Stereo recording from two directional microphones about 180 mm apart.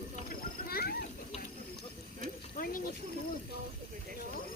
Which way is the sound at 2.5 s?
50° left (ahead or behind).